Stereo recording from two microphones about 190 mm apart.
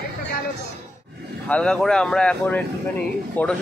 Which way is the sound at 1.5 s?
5° left (ahead or behind).